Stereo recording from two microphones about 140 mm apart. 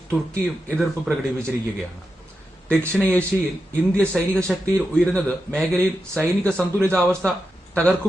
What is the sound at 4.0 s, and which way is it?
A man's voice, 5° left (ahead or behind).